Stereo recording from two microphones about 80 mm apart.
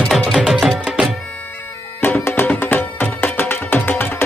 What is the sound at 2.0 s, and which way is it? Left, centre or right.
Music, left.